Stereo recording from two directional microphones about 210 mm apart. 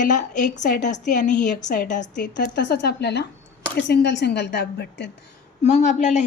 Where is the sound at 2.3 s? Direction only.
55° left (ahead or behind).